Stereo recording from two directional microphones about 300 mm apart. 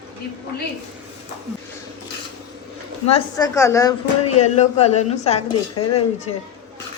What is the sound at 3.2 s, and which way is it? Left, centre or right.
Speech, centre.